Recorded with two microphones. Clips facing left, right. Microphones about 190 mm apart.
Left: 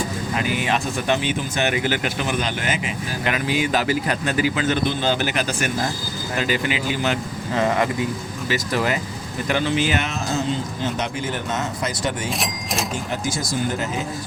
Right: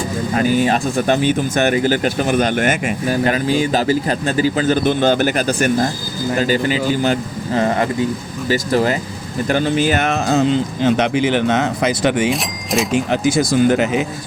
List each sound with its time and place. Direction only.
0.3 s a man's voice: 40° right (ahead or behind)
0.9 s speech: 50° right (ahead or behind)
3.3 s a man's voice: 30° right (ahead or behind)
4.9 s speech: 50° right (ahead or behind)
5.5 s a man's voice: 35° right (ahead or behind)
10.1 s speech: 70° right (ahead or behind)
12.3 s speech: centre (ahead or behind)
12.9 s speech: 70° right (ahead or behind); by 14.0 s 85° right